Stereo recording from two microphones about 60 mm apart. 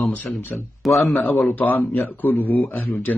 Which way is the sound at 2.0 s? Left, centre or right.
Left.